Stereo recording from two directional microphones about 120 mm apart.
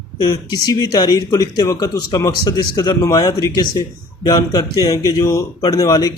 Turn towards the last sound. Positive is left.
turn(degrees=30)  # may be behind; listen again after turning